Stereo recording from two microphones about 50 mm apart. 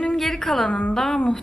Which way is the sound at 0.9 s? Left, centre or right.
Centre.